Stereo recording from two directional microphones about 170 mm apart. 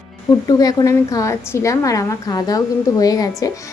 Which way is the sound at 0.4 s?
20° left (ahead or behind).